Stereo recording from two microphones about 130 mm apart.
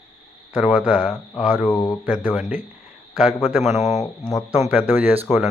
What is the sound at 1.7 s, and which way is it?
Speech, 30° left (ahead or behind).